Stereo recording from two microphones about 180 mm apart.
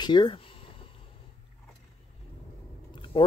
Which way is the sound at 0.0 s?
25° left (ahead or behind).